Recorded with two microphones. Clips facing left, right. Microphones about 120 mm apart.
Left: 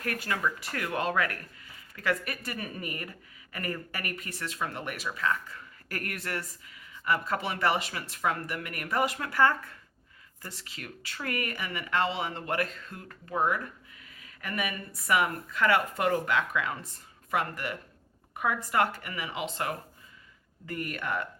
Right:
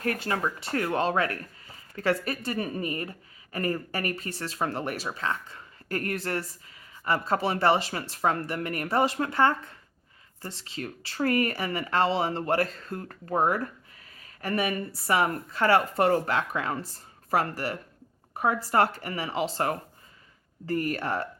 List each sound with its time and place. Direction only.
0.0 s speech: 30° right (ahead or behind)